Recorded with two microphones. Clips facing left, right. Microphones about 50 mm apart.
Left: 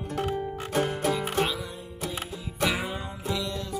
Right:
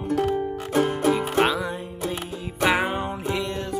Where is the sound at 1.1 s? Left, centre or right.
Right.